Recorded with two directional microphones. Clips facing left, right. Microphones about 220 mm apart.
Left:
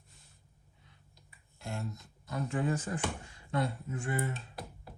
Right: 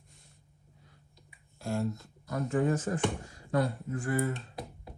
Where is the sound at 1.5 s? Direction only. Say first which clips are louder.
Right 8 dB; 20° left (ahead or behind).